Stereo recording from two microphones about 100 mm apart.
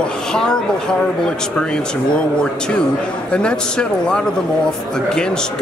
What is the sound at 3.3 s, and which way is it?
Speech, 10° left (ahead or behind).